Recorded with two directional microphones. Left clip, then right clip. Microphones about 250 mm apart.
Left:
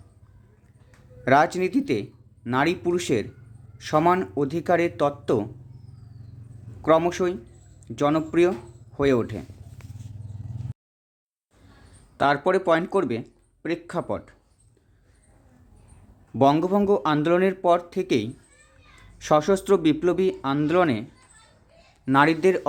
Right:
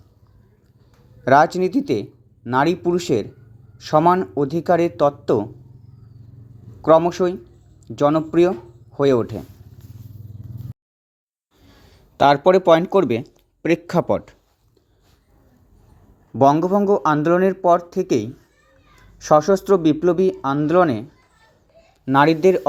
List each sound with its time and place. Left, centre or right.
1.2 s speech: centre
6.8 s speech: centre
12.1 s speech: centre
16.4 s speech: centre
22.0 s speech: centre